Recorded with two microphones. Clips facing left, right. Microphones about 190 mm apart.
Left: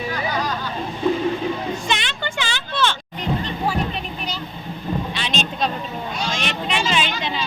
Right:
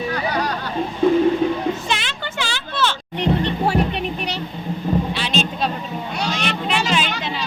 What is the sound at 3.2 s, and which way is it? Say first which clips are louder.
Music: right 6 dB; 70° right (ahead or behind).